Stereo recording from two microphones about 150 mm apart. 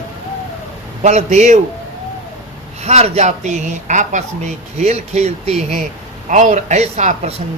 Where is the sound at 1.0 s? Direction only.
50° right (ahead or behind).